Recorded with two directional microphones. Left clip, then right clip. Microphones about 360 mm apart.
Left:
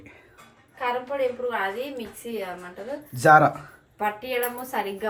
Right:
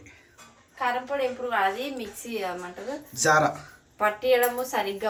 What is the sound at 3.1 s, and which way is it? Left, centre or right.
A woman's voice, centre.